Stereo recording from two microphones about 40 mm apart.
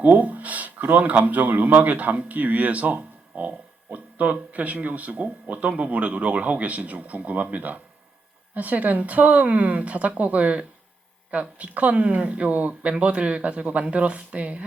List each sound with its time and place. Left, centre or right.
0.0 s speech: right